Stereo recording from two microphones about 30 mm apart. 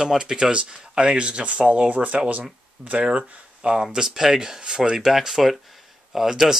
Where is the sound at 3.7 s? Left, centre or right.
Centre.